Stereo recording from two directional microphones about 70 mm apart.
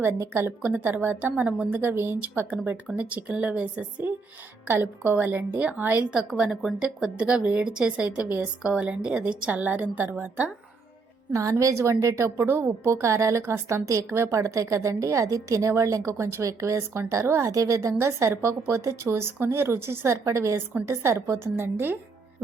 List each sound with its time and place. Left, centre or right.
0.0 s a woman's voice: right
2.9 s a woman's voice: right
11.3 s a woman's voice: right
17.9 s a woman's voice: right
21.6 s a woman's voice: right